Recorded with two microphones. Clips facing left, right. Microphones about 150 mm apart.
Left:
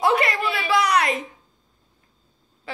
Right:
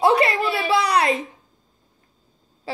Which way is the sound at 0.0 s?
30° right (ahead or behind).